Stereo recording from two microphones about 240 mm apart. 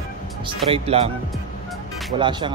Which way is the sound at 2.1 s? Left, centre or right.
Centre.